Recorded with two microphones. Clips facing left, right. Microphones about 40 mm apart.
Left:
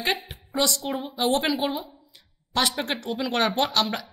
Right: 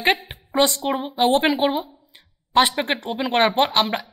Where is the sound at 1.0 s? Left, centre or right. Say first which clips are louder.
Right 6 dB; right.